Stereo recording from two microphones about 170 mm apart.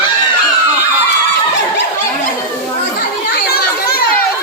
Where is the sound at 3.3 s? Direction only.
65° left (ahead or behind).